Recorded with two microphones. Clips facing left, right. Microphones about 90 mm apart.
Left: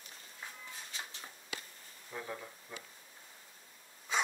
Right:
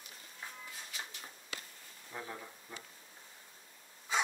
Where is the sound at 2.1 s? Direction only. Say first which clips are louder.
Left 2 dB; 5° right (ahead or behind).